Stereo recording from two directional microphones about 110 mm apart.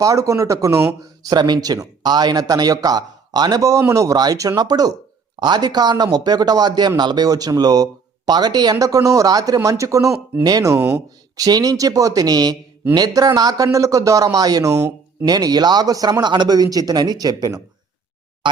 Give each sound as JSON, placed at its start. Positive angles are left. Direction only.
{"t": 0.0, "sound": "speech", "side_deg": -30}
{"t": 1.3, "sound": "speech", "side_deg": -40}
{"t": 11.3, "sound": "speech", "side_deg": -35}